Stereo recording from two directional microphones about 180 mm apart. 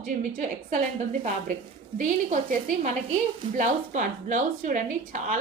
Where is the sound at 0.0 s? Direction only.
45° right (ahead or behind).